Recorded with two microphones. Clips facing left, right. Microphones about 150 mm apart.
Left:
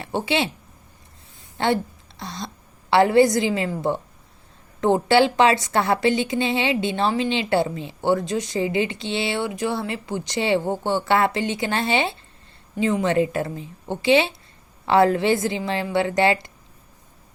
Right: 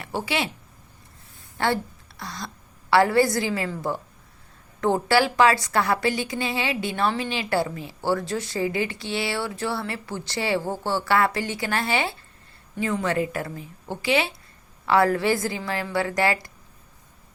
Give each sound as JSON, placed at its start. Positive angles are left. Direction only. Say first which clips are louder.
{"t": 0.0, "sound": "a woman's voice", "louder": "left 4 dB", "side_deg": 25}
{"t": 1.5, "sound": "a sound", "louder": "left 3 dB", "side_deg": 20}
{"t": 2.9, "sound": "a woman's voice", "louder": "left 3 dB", "side_deg": 20}